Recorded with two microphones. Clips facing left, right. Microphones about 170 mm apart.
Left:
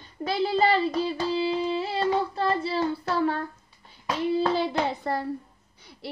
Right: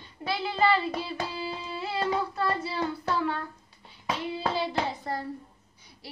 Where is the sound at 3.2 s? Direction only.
40° left (ahead or behind).